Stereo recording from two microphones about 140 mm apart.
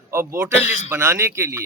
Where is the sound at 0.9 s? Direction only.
15° right (ahead or behind).